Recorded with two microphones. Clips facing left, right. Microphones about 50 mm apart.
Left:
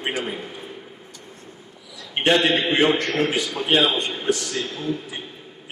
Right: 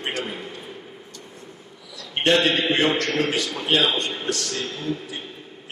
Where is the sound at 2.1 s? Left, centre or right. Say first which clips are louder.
Left 1 dB; centre.